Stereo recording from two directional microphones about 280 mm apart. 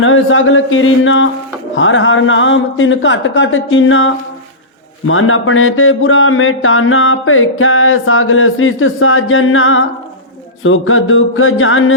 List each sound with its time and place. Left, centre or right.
0.0 s speech: left